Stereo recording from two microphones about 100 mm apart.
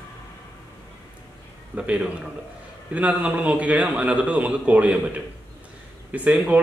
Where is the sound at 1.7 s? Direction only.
10° right (ahead or behind).